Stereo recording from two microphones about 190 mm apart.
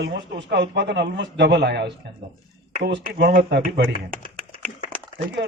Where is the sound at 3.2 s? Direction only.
60° right (ahead or behind).